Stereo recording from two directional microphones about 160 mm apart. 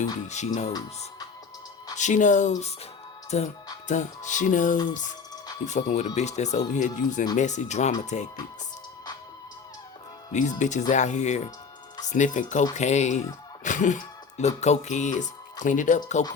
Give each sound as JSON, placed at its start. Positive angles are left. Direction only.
{"t": 0.0, "sound": "speech", "side_deg": 50}
{"t": 2.0, "sound": "speech", "side_deg": 50}
{"t": 3.2, "sound": "music", "side_deg": 45}
{"t": 5.6, "sound": "speech", "side_deg": 45}
{"t": 10.6, "sound": "speech", "side_deg": 50}